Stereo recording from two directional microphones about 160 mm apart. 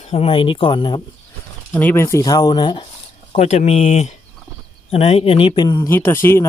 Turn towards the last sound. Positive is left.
turn(degrees=15)  # may be behind; listen again after turning